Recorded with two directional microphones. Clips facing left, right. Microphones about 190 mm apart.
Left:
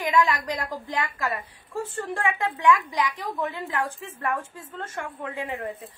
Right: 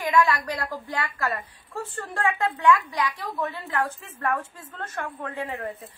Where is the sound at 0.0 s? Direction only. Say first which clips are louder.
Right 1 dB; 15° left (ahead or behind).